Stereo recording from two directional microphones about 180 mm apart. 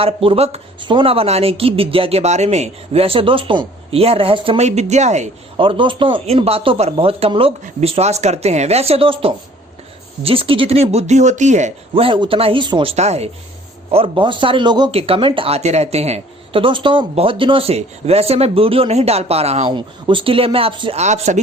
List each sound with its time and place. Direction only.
0.0 s speech: 30° right (ahead or behind)